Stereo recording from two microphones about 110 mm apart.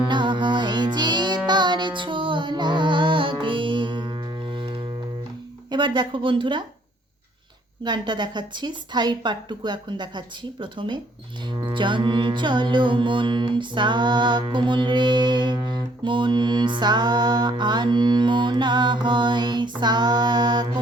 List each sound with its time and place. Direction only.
0.1 s music: 45° right (ahead or behind)
7.9 s music: 45° right (ahead or behind)